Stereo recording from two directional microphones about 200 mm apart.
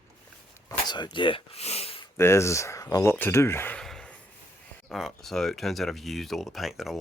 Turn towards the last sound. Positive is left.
turn(degrees=0)  # may be behind; listen again after turning